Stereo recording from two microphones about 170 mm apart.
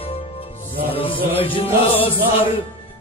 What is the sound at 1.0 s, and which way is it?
Music, 30° left (ahead or behind).